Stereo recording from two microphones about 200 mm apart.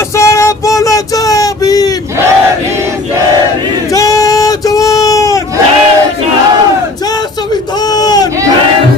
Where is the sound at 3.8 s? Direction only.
15° left (ahead or behind).